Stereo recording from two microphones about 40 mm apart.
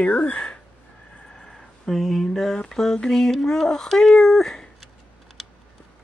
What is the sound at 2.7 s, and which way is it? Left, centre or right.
Speech, centre.